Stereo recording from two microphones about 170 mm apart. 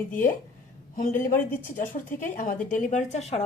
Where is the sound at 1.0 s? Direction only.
50° left (ahead or behind).